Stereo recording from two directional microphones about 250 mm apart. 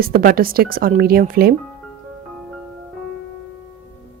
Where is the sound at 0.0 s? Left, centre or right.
Right.